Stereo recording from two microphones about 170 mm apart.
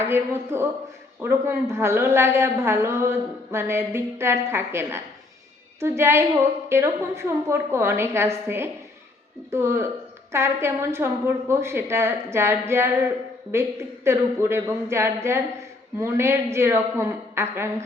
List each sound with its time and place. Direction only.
0.0 s a woman's voice: 15° right (ahead or behind)